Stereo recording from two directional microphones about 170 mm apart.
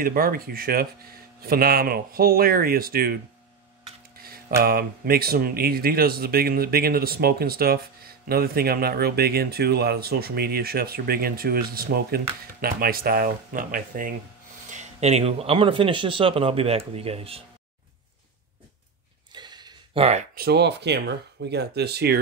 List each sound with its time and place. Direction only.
0.0 s speech: 60° right (ahead or behind)
4.2 s a sound: 60° right (ahead or behind)
4.6 s speech: 60° right (ahead or behind)
14.7 s speech: 40° right (ahead or behind)
19.3 s a sound: 25° right (ahead or behind)
20.3 s speech: 70° right (ahead or behind)